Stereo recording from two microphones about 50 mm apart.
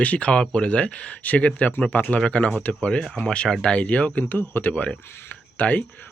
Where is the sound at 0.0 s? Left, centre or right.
Left.